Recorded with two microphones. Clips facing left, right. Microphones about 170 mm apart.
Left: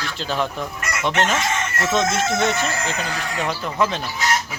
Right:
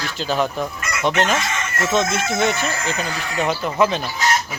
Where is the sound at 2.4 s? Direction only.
5° right (ahead or behind).